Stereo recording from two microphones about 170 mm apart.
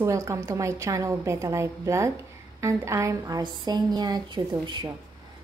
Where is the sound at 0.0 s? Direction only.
15° right (ahead or behind).